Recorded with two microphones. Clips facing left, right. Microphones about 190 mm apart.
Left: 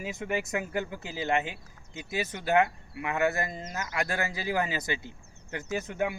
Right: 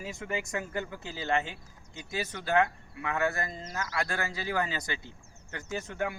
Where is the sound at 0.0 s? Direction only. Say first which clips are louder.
Left 3 dB; 20° left (ahead or behind).